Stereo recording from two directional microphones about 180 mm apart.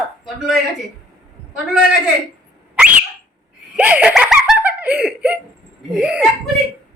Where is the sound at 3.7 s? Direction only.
5° right (ahead or behind).